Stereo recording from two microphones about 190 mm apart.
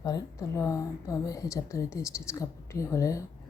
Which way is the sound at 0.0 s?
20° left (ahead or behind).